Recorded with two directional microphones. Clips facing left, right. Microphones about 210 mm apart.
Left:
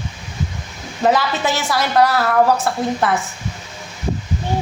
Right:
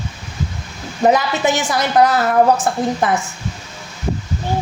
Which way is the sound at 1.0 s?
15° right (ahead or behind).